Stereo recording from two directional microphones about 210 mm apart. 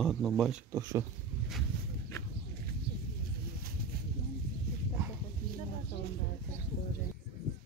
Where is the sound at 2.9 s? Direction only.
50° right (ahead or behind).